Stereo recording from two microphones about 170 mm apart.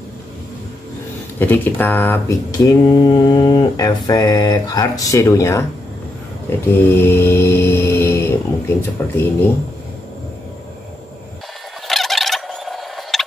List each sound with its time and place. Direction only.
1.4 s mantra: 10° left (ahead or behind)
6.9 s speech: 15° left (ahead or behind)
11.9 s gobble: centre (ahead or behind)